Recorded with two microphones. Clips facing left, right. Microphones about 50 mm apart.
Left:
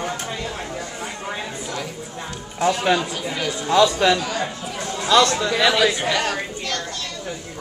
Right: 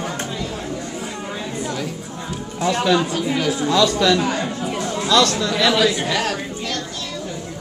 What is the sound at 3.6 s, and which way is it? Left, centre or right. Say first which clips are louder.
A man's voice: left 1 dB; left.